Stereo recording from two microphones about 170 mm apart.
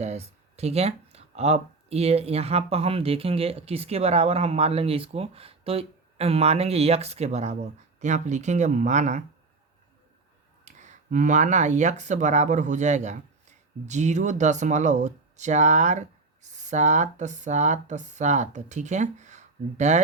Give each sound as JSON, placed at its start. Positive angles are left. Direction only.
{"t": 0.0, "sound": "speech", "side_deg": -40}
{"t": 10.7, "sound": "speech", "side_deg": -45}